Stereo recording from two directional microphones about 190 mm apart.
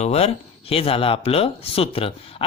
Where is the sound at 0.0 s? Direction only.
35° left (ahead or behind).